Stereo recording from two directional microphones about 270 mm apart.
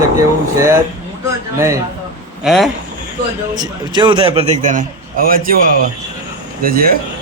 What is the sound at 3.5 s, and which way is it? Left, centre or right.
A man's voice, centre.